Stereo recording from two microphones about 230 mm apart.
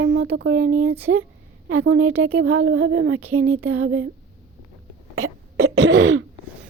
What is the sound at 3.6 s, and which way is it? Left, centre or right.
Speech, right.